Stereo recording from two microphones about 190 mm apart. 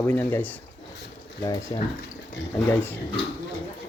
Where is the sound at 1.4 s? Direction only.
20° left (ahead or behind).